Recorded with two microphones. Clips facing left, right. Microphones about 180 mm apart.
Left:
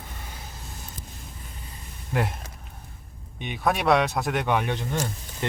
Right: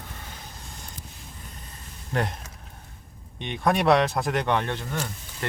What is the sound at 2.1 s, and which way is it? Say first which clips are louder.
Speech: even; 5° left (ahead or behind).